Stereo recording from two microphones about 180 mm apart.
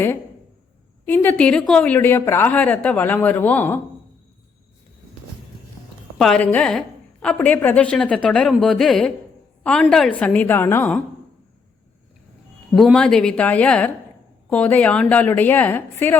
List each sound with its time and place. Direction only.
1.0 s a woman's voice: 10° left (ahead or behind)
6.1 s a woman's voice: 5° left (ahead or behind)
12.7 s a woman's voice: 5° left (ahead or behind)